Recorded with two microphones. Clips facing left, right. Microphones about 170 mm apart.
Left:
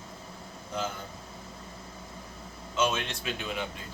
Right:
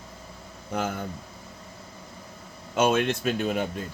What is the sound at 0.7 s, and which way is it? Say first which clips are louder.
Speech: right 5 dB; 60° right (ahead or behind).